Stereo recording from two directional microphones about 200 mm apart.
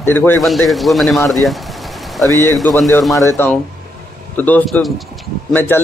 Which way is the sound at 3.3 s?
10° left (ahead or behind).